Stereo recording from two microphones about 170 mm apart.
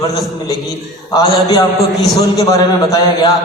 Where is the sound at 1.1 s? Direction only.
20° left (ahead or behind).